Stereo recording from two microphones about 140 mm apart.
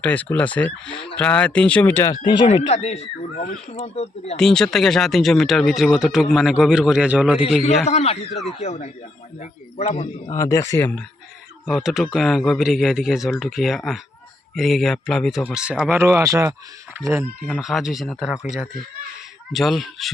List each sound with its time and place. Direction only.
0.0 s speech: 10° left (ahead or behind)
2.2 s speech: 35° left (ahead or behind)
2.6 s speech: 50° left (ahead or behind)
3.8 s speech: 50° left (ahead or behind)
4.4 s speech: 5° left (ahead or behind)
7.9 s speech: 50° left (ahead or behind)
10.3 s speech: 25° left (ahead or behind)
11.7 s speech: centre (ahead or behind)
15.4 s speech: 10° right (ahead or behind)
17.6 s speech: centre (ahead or behind)
19.5 s speech: centre (ahead or behind)